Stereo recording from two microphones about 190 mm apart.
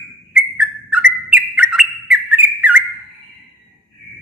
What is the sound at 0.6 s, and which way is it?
Bird, 5° right (ahead or behind).